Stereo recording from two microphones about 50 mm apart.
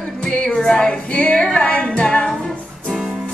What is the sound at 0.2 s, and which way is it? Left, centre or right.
Music, left.